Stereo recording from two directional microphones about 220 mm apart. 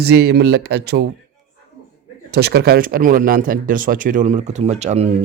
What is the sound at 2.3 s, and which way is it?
Speech, 45° right (ahead or behind).